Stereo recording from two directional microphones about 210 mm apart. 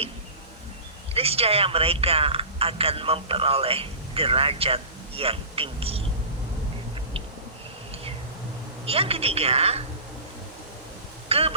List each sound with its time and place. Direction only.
1.1 s speech: 30° right (ahead or behind)
8.9 s speech: 25° right (ahead or behind)
11.3 s speech: 25° right (ahead or behind)